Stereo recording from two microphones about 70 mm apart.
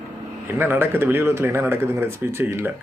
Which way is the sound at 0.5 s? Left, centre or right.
Right.